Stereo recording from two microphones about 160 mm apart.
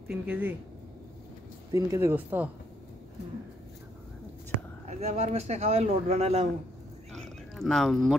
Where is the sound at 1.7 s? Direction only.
20° right (ahead or behind).